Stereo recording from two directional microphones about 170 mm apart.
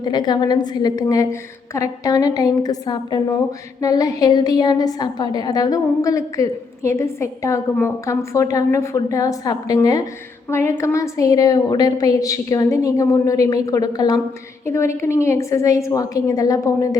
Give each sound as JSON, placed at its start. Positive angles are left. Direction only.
{"t": 0.0, "sound": "a woman's voice", "side_deg": 25}